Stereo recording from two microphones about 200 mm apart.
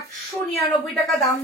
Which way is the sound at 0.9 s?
Centre (ahead or behind).